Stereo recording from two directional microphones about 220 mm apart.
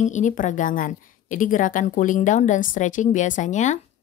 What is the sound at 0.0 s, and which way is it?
Speech, 35° left (ahead or behind).